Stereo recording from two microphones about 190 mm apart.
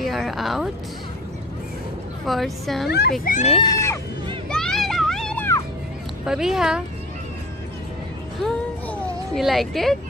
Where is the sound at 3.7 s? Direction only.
15° left (ahead or behind).